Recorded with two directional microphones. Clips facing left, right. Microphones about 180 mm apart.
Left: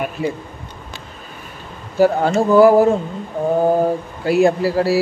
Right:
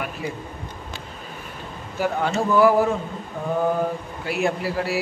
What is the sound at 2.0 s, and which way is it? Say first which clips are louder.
Speech: left 8 dB; 35° left (ahead or behind).